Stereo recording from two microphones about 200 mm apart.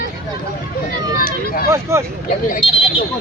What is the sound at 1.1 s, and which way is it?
Speech, 45° left (ahead or behind).